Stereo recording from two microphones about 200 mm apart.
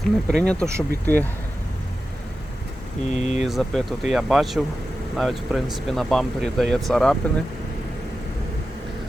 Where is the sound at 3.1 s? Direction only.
35° left (ahead or behind).